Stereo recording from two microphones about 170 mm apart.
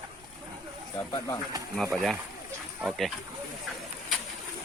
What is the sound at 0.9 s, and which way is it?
Pigeon, 20° left (ahead or behind).